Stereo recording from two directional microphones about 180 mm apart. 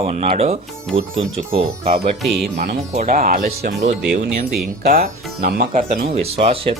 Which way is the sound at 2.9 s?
50° right (ahead or behind).